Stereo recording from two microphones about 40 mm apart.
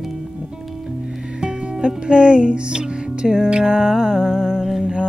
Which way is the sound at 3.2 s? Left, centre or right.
Centre.